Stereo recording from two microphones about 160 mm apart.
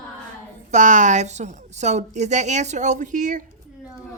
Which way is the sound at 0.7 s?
50° right (ahead or behind).